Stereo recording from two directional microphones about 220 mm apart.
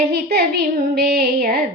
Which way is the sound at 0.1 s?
45° right (ahead or behind).